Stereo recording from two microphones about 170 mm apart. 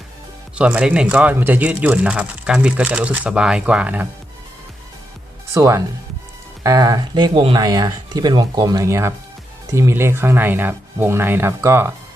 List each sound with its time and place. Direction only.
0.5 s speech: 5° right (ahead or behind)
5.5 s speech: 15° right (ahead or behind)